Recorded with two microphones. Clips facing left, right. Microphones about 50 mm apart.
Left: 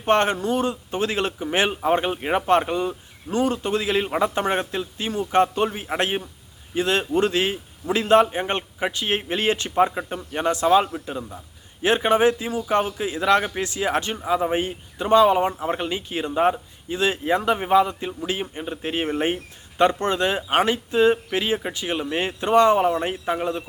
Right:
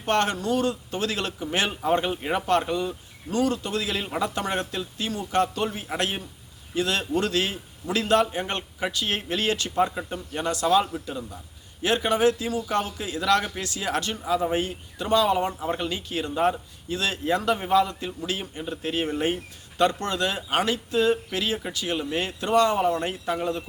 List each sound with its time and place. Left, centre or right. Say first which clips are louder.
0.0 s a man's voice: left 4 dB; left